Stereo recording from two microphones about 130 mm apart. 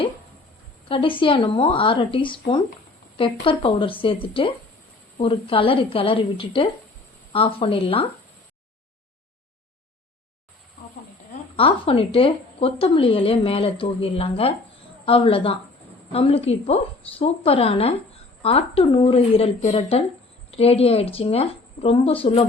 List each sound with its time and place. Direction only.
0.9 s a woman's voice: 40° left (ahead or behind)
11.5 s a woman's voice: 45° left (ahead or behind)
19.6 s a woman's voice: 60° left (ahead or behind)